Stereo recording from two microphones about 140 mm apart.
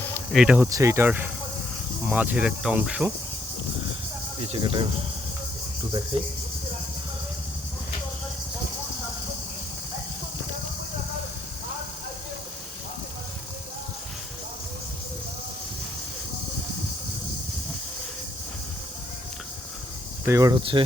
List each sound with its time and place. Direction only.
0.3 s cricket: 10° right (ahead or behind)
0.7 s cricket: 20° right (ahead or behind)
4.4 s cricket: 40° right (ahead or behind)
6.1 s speech: 45° right (ahead or behind)
20.2 s speech: 20° right (ahead or behind)
20.6 s cricket: 35° right (ahead or behind)